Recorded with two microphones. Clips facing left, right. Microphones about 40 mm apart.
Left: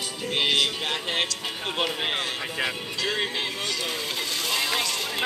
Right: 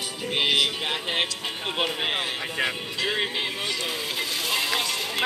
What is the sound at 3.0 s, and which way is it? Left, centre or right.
Music, centre.